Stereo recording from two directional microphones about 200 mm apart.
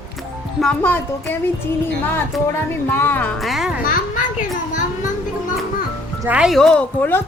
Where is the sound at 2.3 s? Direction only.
Centre (ahead or behind).